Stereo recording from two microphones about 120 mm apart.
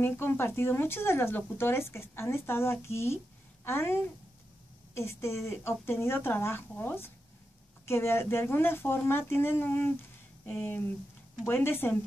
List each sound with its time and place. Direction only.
0.0 s speech: 20° left (ahead or behind)